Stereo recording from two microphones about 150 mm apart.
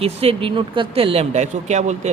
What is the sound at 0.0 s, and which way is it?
A man's voice, 40° right (ahead or behind).